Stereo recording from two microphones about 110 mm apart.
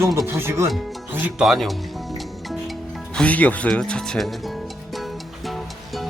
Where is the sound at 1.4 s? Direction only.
Centre (ahead or behind).